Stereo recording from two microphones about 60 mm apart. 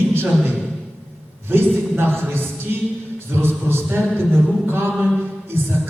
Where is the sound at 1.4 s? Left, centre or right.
Right.